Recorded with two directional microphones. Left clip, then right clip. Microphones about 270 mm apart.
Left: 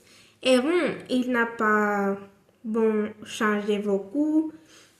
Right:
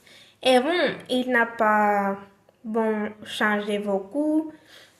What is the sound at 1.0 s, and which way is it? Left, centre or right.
A woman's voice, centre.